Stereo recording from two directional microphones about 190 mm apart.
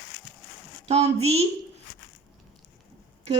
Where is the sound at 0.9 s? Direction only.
35° right (ahead or behind).